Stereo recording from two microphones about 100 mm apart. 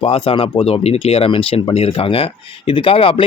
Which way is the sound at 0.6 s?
85° left.